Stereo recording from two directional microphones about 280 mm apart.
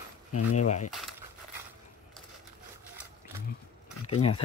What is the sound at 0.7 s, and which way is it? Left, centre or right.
Speech, left.